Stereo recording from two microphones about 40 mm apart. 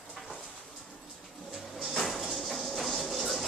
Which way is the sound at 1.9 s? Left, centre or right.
Centre.